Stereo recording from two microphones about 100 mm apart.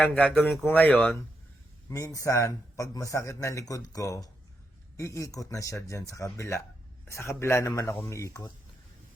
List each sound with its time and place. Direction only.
0.0 s speech: 10° left (ahead or behind)
0.6 s speech: 20° left (ahead or behind)
1.9 s speech: 35° left (ahead or behind)